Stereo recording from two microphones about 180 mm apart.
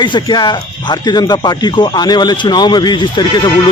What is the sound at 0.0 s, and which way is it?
Speech, 25° left (ahead or behind).